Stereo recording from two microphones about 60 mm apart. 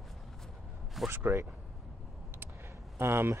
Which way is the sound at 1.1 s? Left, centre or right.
Right.